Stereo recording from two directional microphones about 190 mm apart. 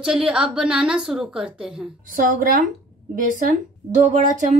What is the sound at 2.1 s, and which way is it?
Speech, 45° right (ahead or behind).